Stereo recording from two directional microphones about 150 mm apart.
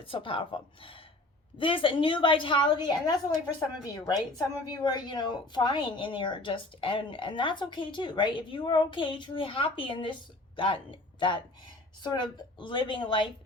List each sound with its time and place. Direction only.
0.0 s a woman's voice: 35° left (ahead or behind)